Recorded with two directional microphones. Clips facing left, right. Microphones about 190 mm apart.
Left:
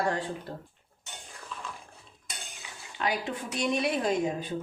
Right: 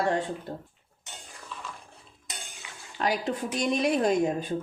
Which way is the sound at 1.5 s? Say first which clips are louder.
Even; centre (ahead or behind).